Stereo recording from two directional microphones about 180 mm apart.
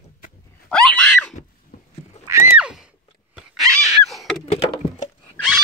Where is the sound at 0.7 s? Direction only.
5° left (ahead or behind).